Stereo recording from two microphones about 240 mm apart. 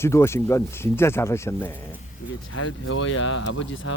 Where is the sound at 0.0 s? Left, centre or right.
Centre.